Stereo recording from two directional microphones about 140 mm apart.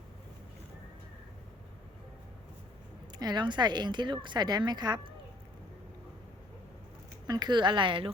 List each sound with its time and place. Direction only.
3.2 s speech: 30° right (ahead or behind)
7.3 s speech: 30° right (ahead or behind)